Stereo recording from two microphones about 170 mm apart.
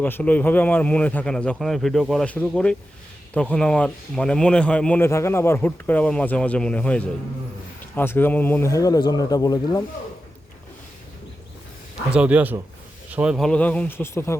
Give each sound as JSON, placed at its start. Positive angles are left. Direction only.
{"t": 0.0, "sound": "speech", "side_deg": 10}
{"t": 12.1, "sound": "speech", "side_deg": -10}